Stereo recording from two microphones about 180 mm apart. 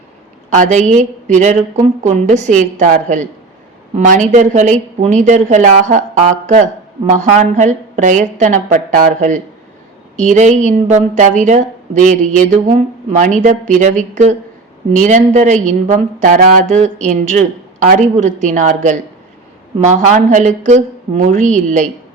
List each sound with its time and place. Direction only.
0.5 s a woman's voice: 45° right (ahead or behind)